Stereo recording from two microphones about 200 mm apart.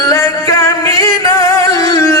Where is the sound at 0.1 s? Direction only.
15° left (ahead or behind).